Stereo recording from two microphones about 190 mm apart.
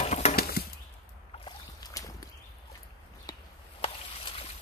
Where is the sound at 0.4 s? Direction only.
55° left (ahead or behind).